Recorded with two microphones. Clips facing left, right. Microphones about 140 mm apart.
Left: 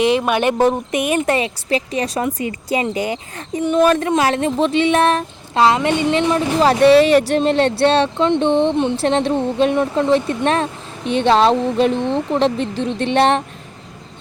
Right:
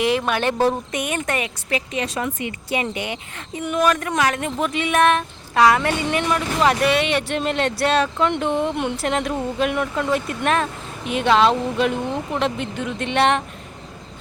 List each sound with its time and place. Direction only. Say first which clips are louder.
0.0 s a woman's voice: left 4 dB; 20° left (ahead or behind)